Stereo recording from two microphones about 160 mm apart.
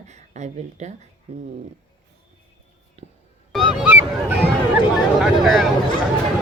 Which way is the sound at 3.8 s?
10° right (ahead or behind).